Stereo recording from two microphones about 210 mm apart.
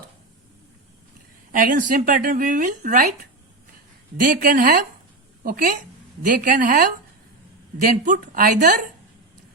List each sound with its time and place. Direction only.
1.5 s a woman's voice: 40° right (ahead or behind)